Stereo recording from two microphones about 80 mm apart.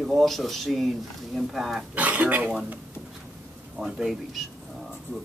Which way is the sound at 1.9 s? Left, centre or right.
Centre.